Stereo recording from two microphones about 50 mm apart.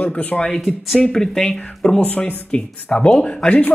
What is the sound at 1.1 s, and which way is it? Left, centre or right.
Speech, centre.